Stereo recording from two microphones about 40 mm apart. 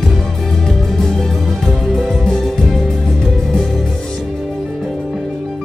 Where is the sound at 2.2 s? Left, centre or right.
Centre.